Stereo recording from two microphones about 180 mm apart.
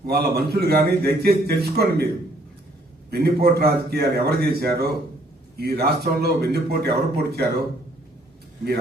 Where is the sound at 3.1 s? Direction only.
60° right (ahead or behind).